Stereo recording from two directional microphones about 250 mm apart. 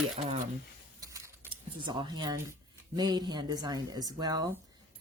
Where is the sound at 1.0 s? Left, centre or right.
Centre.